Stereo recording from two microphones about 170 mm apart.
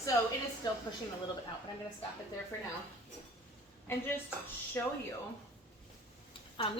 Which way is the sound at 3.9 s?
10° left (ahead or behind).